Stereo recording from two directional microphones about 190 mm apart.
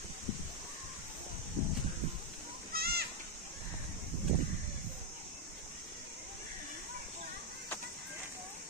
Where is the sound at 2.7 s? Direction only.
55° right (ahead or behind).